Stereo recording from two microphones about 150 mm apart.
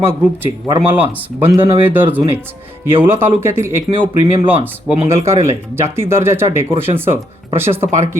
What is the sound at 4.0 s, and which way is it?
Speech, 35° right (ahead or behind).